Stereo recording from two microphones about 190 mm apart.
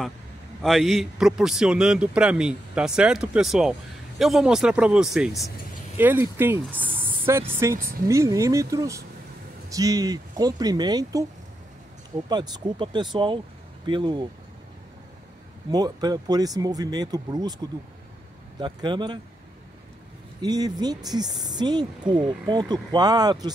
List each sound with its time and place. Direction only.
0.6 s a man's voice: centre (ahead or behind); by 11.2 s 20° right (ahead or behind)
12.3 s speech: 20° right (ahead or behind)
15.7 s speech: 20° right (ahead or behind)
18.6 s speech: 25° right (ahead or behind)
20.4 s speech: 20° right (ahead or behind)